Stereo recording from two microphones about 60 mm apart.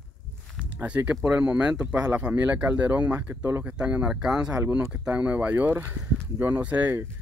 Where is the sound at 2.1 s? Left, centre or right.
Right.